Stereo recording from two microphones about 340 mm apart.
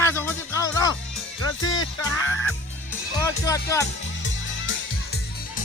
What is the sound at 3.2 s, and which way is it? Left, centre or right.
Speech, centre.